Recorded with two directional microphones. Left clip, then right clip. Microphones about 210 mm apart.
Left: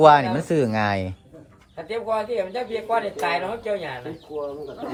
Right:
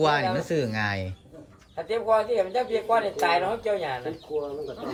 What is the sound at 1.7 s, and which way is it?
A man's voice, 40° right (ahead or behind).